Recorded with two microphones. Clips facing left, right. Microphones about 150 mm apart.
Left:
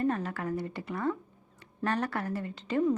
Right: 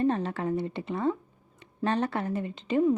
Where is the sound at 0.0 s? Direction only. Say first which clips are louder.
Right 4 dB; 25° right (ahead or behind).